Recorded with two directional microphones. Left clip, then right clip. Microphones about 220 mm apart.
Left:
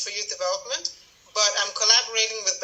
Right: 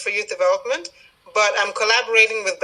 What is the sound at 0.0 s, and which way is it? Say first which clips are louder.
A man's voice: right 8 dB; 55° right (ahead or behind).